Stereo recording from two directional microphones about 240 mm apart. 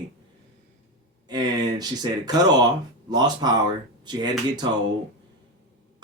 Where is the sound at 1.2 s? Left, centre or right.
Centre.